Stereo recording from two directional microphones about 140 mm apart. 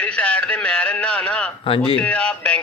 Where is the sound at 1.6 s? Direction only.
40° left (ahead or behind).